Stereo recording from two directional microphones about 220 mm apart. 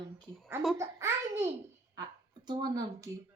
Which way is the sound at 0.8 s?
10° right (ahead or behind).